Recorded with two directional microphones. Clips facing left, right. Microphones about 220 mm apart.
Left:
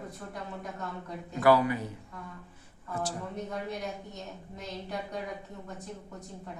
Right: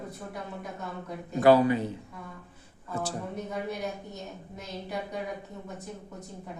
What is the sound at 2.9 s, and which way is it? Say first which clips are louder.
Speech: right 1 dB; 25° right (ahead or behind).